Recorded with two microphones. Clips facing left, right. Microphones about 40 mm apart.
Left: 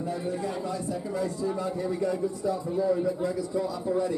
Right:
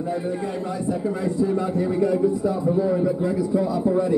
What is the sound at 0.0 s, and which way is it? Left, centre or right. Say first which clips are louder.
A man's voice: right 5 dB; centre.